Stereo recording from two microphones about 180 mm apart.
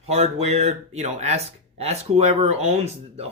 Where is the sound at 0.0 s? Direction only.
35° right (ahead or behind).